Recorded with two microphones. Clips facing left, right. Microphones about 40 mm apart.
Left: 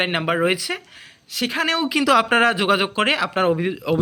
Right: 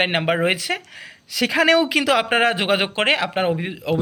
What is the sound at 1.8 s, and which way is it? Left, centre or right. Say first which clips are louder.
Speech: right 1 dB; right.